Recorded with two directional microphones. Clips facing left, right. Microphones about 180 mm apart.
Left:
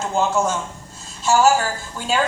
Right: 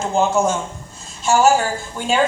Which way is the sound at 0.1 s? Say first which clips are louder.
Right 3 dB; 15° right (ahead or behind).